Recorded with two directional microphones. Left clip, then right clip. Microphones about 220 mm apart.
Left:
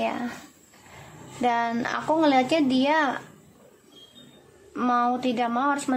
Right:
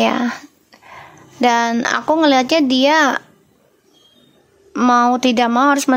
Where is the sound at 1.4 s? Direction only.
40° right (ahead or behind).